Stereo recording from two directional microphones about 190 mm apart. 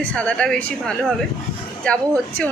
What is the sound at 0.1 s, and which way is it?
Speech, 5° left (ahead or behind).